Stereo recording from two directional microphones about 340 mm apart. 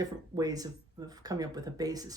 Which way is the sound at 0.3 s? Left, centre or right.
Centre.